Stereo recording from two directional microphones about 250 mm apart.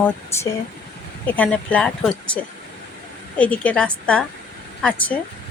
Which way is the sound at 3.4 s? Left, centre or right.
Centre.